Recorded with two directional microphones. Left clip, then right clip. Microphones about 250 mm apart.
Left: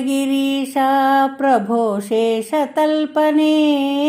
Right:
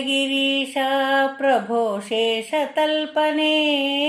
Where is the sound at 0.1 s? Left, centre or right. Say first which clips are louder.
Even; centre.